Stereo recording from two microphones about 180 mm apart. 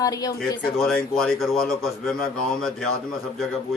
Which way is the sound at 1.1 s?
Centre (ahead or behind).